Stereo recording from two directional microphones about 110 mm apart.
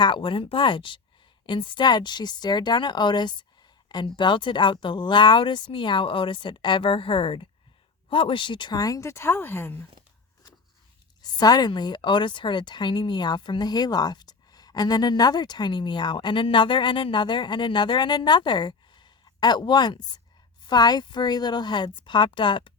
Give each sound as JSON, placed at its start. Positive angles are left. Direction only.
{"t": 0.0, "sound": "a woman's voice", "side_deg": 50}
{"t": 11.2, "sound": "a woman's voice", "side_deg": 35}